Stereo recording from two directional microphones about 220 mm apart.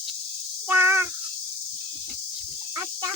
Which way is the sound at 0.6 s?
10° right (ahead or behind).